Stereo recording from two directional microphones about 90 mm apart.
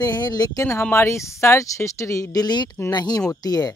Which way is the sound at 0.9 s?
30° left (ahead or behind).